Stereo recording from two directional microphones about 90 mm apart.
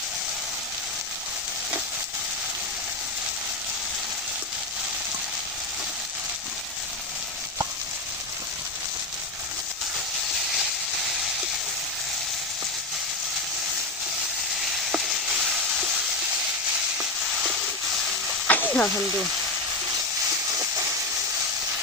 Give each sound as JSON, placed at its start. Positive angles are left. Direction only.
{"t": 18.4, "sound": "sizzle", "side_deg": 20}
{"t": 19.0, "sound": "speech", "side_deg": -5}